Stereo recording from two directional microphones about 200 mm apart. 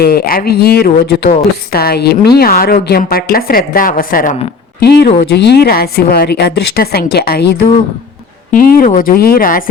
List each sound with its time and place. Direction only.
0.0 s speech: 50° left (ahead or behind)